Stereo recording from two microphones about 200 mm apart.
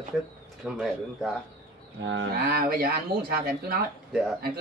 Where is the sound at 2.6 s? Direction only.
45° right (ahead or behind).